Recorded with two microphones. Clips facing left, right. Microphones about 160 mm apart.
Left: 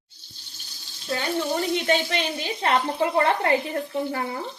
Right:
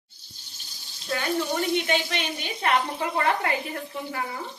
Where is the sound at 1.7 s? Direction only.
40° left (ahead or behind).